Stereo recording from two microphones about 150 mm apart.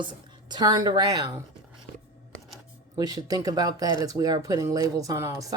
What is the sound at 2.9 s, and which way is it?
Speech, 25° right (ahead or behind).